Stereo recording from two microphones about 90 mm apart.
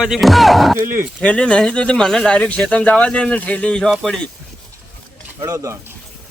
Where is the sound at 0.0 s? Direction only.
Centre (ahead or behind).